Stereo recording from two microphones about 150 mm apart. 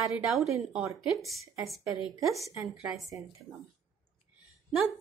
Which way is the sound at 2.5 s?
20° right (ahead or behind).